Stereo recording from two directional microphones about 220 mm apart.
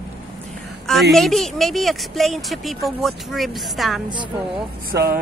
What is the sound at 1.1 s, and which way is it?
Speech, centre (ahead or behind).